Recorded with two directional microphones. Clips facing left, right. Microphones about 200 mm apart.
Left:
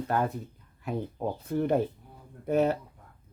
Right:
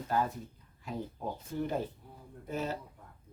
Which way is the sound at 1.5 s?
60° left (ahead or behind).